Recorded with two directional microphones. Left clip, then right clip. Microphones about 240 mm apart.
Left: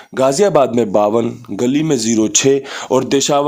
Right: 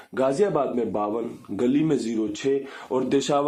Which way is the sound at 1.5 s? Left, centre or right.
Left.